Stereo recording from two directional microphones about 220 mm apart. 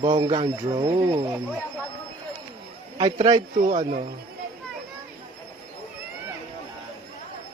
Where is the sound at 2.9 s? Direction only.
25° right (ahead or behind).